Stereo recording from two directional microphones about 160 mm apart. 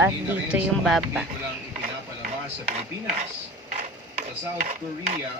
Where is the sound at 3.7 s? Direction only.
50° right (ahead or behind).